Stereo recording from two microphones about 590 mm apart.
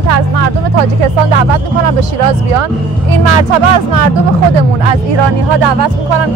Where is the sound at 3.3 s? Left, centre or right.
Right.